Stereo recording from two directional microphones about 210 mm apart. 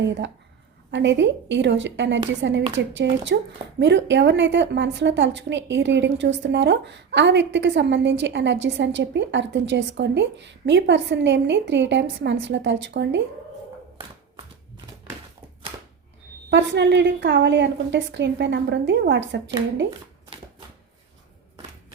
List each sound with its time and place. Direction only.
0.0 s a woman's voice: 60° right (ahead or behind)
16.5 s a woman's voice: 55° right (ahead or behind)